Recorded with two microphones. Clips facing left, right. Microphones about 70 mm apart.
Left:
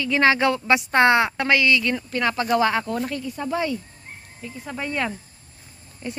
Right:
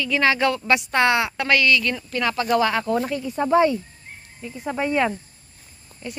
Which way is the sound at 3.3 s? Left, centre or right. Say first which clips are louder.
Right 10 dB; right.